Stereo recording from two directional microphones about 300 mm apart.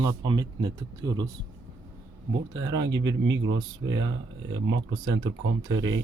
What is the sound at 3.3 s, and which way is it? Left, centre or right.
Speech, right.